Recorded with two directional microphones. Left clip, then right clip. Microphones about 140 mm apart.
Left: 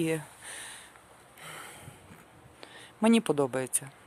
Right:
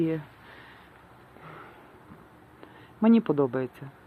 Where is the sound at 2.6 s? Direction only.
35° left (ahead or behind).